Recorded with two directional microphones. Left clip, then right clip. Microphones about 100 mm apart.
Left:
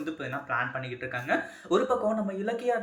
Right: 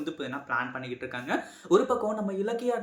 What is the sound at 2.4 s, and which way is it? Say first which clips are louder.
Speech: right 1 dB; 35° right (ahead or behind).